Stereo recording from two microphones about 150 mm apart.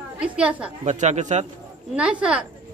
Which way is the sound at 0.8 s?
50° right (ahead or behind).